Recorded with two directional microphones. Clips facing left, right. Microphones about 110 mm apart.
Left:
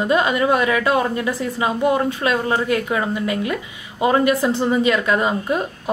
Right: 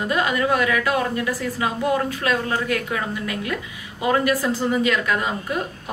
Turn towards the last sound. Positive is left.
turn(degrees=25)  # may be behind; listen again after turning